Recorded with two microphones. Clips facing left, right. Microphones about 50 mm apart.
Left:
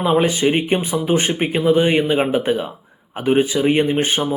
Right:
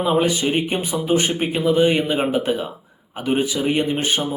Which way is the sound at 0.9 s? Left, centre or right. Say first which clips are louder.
Left 3 dB; centre.